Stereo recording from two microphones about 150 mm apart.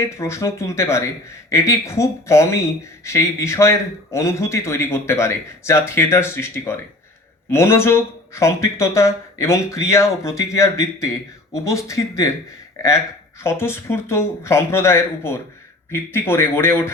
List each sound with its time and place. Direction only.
0.0 s speech: 20° left (ahead or behind)
13.4 s speech: 15° left (ahead or behind)